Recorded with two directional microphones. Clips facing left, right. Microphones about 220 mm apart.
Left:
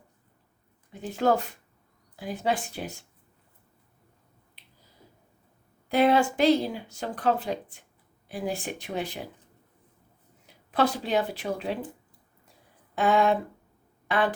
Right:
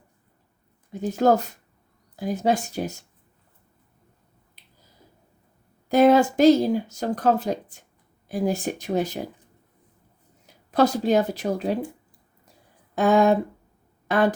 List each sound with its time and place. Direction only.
0.9 s speech: 40° right (ahead or behind)
5.9 s speech: 40° right (ahead or behind)
10.4 s speech: 40° right (ahead or behind)
13.0 s speech: 45° right (ahead or behind)